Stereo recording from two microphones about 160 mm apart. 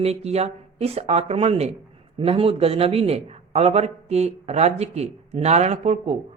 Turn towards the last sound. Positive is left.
turn(degrees=-40)  # may be behind; listen again after turning